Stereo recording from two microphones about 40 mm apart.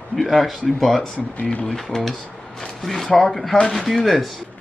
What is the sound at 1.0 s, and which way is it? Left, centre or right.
Speech, left.